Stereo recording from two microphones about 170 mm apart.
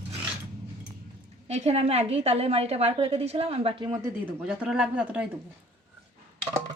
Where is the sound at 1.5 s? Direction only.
40° right (ahead or behind).